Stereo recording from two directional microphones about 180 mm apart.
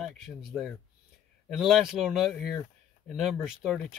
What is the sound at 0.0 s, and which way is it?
Speech, centre (ahead or behind).